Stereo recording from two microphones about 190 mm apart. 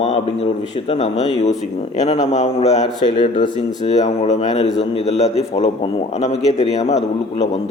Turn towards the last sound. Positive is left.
turn(degrees=35)  # may be behind; listen again after turning